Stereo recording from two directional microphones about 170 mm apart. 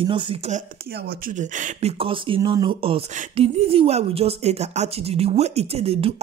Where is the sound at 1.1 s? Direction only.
50° right (ahead or behind).